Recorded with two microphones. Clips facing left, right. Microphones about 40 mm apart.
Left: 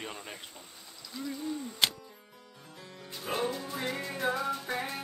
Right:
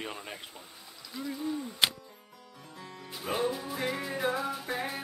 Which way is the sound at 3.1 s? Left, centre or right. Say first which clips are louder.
Right 2 dB; centre.